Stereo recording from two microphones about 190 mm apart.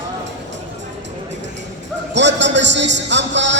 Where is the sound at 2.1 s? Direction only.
70° right (ahead or behind).